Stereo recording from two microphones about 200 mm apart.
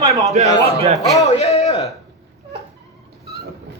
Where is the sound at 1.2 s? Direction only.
30° left (ahead or behind).